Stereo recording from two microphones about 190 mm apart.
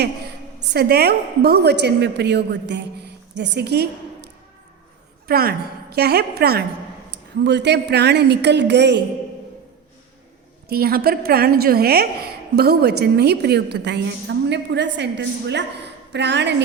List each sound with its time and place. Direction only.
0.7 s a woman's voice: 60° right (ahead or behind)
5.3 s a woman's voice: 55° right (ahead or behind)
10.7 s a woman's voice: 55° right (ahead or behind)